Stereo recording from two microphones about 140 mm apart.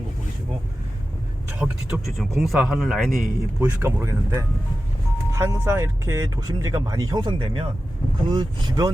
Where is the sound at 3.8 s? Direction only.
20° right (ahead or behind).